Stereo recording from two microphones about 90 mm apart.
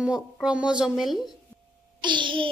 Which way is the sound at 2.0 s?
60° right (ahead or behind).